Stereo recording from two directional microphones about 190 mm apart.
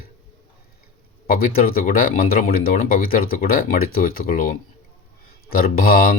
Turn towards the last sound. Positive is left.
turn(degrees=50)  # may be behind; listen again after turning